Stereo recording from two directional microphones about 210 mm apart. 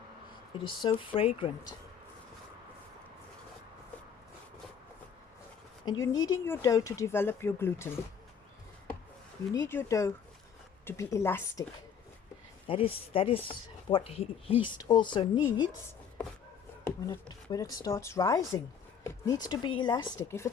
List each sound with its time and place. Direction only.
0.6 s speech: 25° left (ahead or behind)
5.8 s speech: 20° left (ahead or behind)
9.5 s speech: 10° left (ahead or behind)
12.6 s speech: 25° left (ahead or behind)
16.8 s speech: 20° left (ahead or behind)